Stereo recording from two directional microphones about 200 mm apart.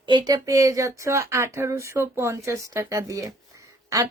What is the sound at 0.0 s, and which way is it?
Speech, 25° right (ahead or behind).